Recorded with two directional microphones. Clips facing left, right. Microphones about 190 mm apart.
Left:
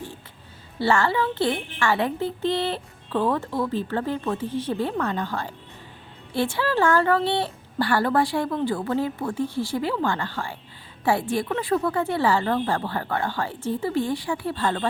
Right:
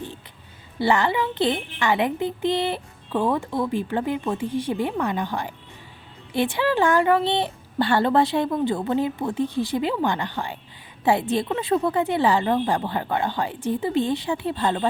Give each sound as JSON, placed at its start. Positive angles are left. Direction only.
{"t": 0.8, "sound": "a woman's voice", "side_deg": -15}